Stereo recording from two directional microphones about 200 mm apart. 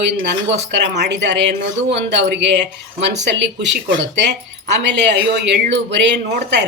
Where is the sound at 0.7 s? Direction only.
60° right (ahead or behind).